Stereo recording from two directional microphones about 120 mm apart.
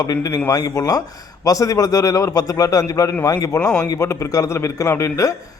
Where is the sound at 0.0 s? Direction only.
30° left (ahead or behind).